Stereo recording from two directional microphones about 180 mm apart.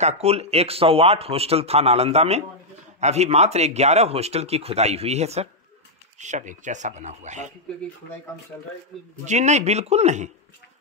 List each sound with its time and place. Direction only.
0.0 s speech: 35° right (ahead or behind)
9.2 s speech: 40° right (ahead or behind)